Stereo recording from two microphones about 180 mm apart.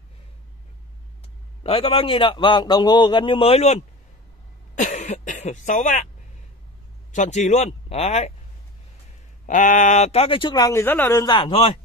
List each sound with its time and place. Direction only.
1.6 s speech: 30° left (ahead or behind)
7.1 s speech: 40° left (ahead or behind)
9.5 s speech: 45° left (ahead or behind)